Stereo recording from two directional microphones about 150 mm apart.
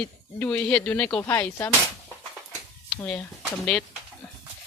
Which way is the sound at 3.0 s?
10° left (ahead or behind).